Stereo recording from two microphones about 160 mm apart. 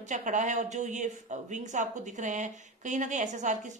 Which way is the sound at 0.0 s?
50° right (ahead or behind).